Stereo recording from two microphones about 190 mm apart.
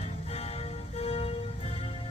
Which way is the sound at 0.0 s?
30° left (ahead or behind).